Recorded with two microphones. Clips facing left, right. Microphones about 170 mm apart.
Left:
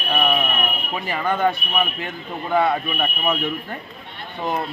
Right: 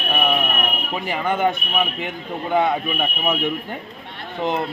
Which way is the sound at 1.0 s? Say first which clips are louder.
Even; 20° right (ahead or behind).